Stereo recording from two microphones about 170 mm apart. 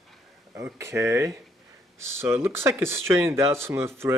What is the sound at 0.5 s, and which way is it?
Speech, 15° right (ahead or behind).